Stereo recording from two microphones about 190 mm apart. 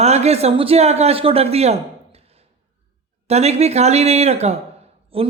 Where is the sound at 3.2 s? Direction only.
35° right (ahead or behind).